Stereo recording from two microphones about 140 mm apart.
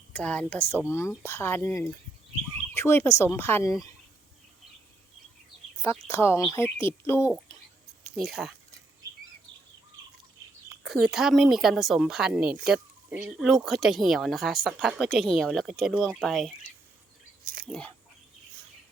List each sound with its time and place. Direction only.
0.1 s a woman's voice: 10° left (ahead or behind); by 3.9 s 25° left (ahead or behind)
5.8 s a woman's voice: 20° left (ahead or behind)
8.1 s speech: centre (ahead or behind)
10.7 s speech: 5° right (ahead or behind)
17.4 s a sound: 90° right
17.7 s speech: 5° left (ahead or behind)